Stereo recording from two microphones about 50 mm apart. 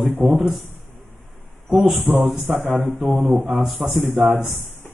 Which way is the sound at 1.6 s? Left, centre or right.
Centre.